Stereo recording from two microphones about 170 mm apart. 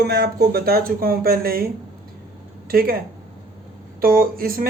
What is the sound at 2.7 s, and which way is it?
Speech, 60° right (ahead or behind).